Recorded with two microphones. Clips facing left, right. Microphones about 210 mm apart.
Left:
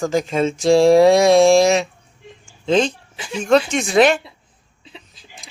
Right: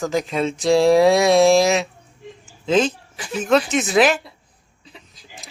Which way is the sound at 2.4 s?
5° right (ahead or behind).